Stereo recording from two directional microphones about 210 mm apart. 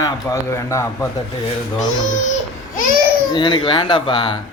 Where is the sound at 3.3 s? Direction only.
20° left (ahead or behind).